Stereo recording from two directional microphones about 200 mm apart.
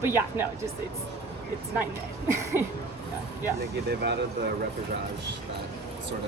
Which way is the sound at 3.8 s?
55° right (ahead or behind).